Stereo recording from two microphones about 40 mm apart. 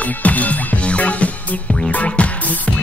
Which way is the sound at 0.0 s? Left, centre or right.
Left.